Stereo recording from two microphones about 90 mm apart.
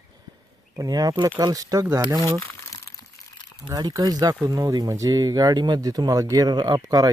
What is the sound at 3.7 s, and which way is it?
Speech, 45° right (ahead or behind).